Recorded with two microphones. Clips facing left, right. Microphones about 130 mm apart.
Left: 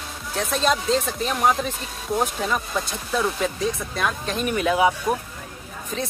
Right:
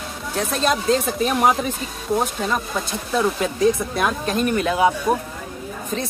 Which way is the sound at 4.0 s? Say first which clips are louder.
Right 4 dB; 10° right (ahead or behind).